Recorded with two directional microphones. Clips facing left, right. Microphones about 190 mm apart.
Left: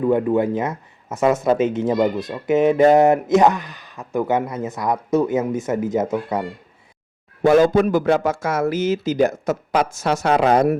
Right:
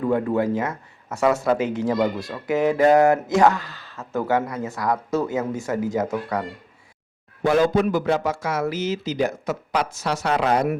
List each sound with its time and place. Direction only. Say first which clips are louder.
0.0 s speech: left 4 dB; 20° left (ahead or behind)
7.4 s a man's voice: left 4 dB; 50° left (ahead or behind)